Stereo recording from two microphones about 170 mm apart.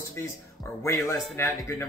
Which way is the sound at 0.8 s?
15° left (ahead or behind).